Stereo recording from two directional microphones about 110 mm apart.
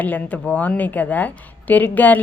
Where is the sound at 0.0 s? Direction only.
15° left (ahead or behind).